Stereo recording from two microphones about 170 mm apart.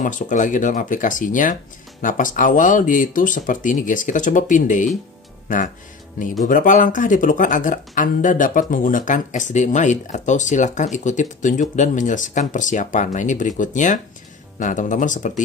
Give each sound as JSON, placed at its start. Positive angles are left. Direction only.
{"t": 0.0, "sound": "speech", "side_deg": 50}
{"t": 6.4, "sound": "speech", "side_deg": 50}